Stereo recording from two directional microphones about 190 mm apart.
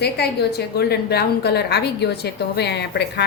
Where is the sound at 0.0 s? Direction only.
60° left (ahead or behind).